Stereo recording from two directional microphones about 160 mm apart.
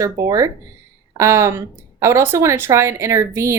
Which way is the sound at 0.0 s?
20° right (ahead or behind).